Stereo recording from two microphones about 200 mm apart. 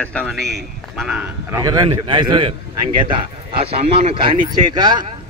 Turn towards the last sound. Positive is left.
turn(degrees=-20)  # may be behind; listen again after turning